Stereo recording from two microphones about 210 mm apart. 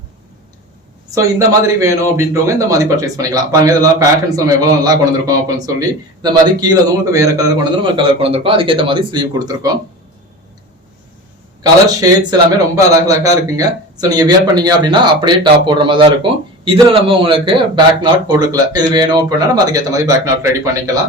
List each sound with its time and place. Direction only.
1.1 s speech: 15° right (ahead or behind)
11.9 s speech: 15° right (ahead or behind)